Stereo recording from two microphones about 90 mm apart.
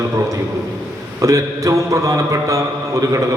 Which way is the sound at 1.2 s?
35° right (ahead or behind).